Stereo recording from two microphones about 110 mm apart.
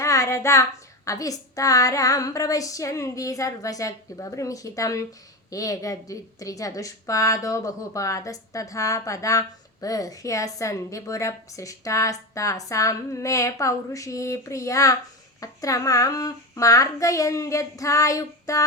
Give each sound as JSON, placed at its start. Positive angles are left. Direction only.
{"t": 0.0, "sound": "a woman's voice", "side_deg": 30}